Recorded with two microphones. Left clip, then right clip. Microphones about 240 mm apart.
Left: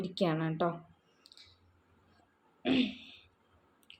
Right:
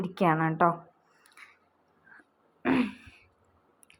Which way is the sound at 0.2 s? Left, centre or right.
Centre.